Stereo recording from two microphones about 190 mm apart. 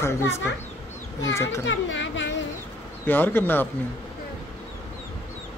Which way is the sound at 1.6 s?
75° left (ahead or behind).